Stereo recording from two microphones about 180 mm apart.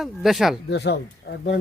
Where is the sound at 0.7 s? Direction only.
70° left (ahead or behind).